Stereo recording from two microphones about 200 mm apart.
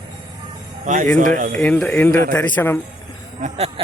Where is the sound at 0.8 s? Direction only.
40° right (ahead or behind).